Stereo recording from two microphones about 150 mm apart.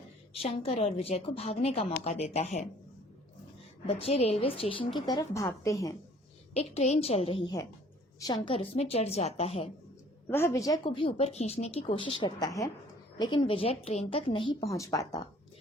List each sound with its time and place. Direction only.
0.3 s a woman's voice: 40° left (ahead or behind)
3.8 s speech: 45° left (ahead or behind)
4.9 s a woman's voice: 25° left (ahead or behind)
6.6 s a woman's voice: 45° left (ahead or behind)
10.2 s a woman's voice: 15° left (ahead or behind)
10.8 s speech: 40° left (ahead or behind)
14.6 s a woman's voice: 20° left (ahead or behind)